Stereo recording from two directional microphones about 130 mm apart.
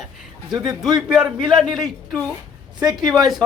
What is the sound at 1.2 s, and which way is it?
Speech, 35° right (ahead or behind).